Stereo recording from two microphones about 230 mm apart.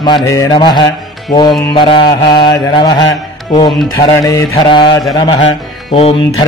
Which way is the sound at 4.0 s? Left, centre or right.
Centre.